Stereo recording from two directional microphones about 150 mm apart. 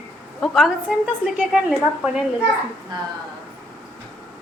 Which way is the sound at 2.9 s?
30° right (ahead or behind).